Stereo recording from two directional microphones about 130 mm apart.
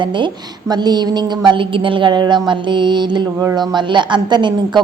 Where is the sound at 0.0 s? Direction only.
40° right (ahead or behind).